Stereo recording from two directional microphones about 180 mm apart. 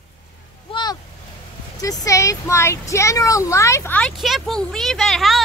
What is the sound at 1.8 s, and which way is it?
Speech, 20° left (ahead or behind).